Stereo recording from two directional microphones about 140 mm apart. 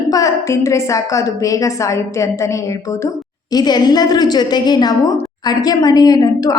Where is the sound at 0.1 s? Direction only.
25° left (ahead or behind).